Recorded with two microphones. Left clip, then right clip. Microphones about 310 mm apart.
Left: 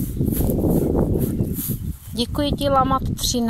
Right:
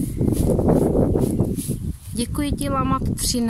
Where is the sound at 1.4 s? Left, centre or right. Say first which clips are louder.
Right 3 dB; right.